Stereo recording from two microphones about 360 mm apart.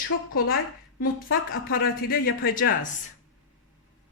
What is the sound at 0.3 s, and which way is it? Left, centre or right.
A woman's voice, left.